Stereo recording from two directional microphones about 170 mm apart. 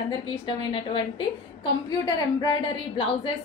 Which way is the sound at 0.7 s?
30° left (ahead or behind).